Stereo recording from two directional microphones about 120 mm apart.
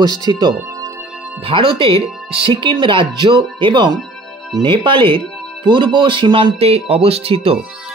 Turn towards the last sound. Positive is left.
turn(degrees=-50)  # may be behind; listen again after turning